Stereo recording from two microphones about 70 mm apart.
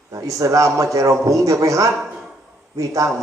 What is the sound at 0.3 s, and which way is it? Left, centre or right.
A man's voice, right.